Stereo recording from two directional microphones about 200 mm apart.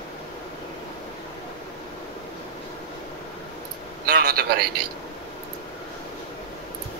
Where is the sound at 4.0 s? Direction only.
50° right (ahead or behind).